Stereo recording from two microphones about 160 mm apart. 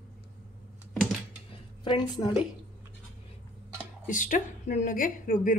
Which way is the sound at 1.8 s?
30° left (ahead or behind).